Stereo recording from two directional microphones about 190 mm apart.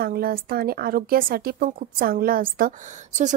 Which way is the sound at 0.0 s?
50° right (ahead or behind).